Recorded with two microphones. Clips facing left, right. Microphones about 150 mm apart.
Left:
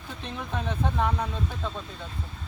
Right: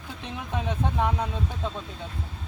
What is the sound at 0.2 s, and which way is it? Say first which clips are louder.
Speech: right 1 dB; 15° right (ahead or behind).